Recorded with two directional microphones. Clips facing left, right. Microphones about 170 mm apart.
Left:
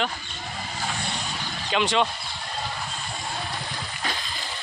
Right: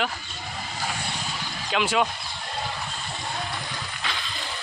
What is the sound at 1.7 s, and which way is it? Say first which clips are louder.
Speech: left 1 dB; 5° right (ahead or behind).